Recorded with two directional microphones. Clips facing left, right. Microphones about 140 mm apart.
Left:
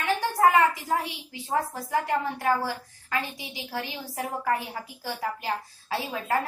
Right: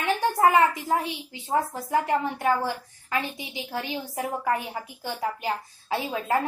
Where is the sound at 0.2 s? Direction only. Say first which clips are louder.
Right 1 dB; 20° right (ahead or behind).